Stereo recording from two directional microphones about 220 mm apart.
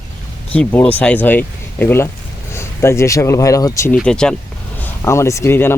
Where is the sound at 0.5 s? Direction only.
5° left (ahead or behind).